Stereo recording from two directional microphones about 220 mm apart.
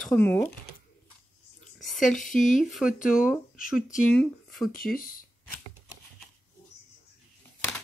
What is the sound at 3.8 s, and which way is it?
Speech, 35° left (ahead or behind).